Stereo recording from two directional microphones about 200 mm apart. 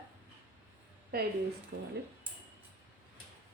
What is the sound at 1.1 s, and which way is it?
Speech, 50° right (ahead or behind).